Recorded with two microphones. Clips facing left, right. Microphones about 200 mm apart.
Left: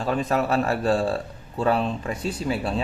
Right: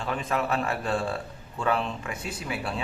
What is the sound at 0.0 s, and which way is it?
Speech, 40° left (ahead or behind).